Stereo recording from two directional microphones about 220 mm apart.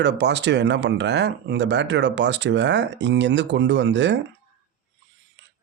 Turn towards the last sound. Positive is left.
turn(degrees=-55)  # may be behind; listen again after turning